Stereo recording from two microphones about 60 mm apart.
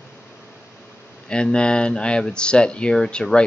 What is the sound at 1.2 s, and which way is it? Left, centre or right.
Speech, centre.